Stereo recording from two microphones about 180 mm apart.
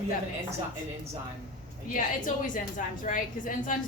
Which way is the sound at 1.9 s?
45° left (ahead or behind).